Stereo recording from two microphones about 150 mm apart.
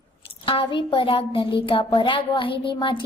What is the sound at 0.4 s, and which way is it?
Speech, 35° left (ahead or behind).